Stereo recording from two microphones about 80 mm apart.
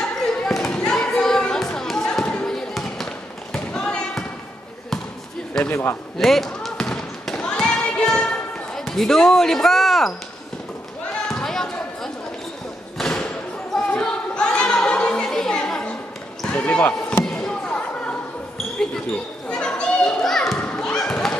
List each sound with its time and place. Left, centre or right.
0.5 s basketball bounce: centre
5.5 s speech: centre
6.1 s basketball bounce: centre
11.2 s a sound: centre
12.9 s thump: centre
13.7 s a sound: centre
16.4 s basketball bounce: centre
17.2 s basketball bounce: centre
19.5 s children playing: centre
20.5 s thump: centre
20.8 s basketball bounce: centre